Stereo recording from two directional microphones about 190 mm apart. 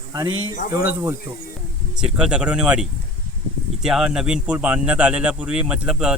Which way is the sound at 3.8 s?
5° right (ahead or behind).